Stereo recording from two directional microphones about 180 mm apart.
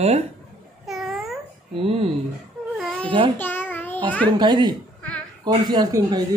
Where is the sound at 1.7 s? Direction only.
30° right (ahead or behind).